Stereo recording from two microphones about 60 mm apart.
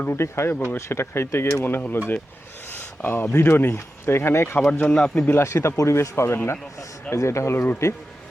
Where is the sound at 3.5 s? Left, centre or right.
Left.